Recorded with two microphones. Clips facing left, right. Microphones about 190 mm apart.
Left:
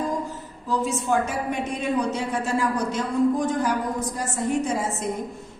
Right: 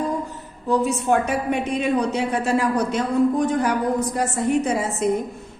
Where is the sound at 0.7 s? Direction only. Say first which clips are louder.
Right 4 dB; 65° right (ahead or behind).